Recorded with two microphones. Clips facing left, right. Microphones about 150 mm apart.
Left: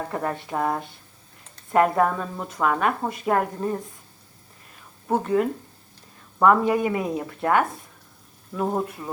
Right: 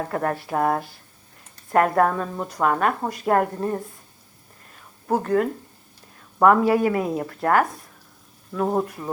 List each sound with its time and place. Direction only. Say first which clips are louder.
0.1 s a woman's voice: right 3 dB; centre (ahead or behind)
5.0 s a woman's voice: right 1 dB; centre (ahead or behind)
8.6 s a woman's voice: right 2 dB; 5° right (ahead or behind)